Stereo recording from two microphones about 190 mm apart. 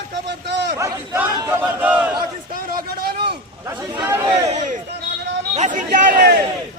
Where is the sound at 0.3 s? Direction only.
65° right (ahead or behind).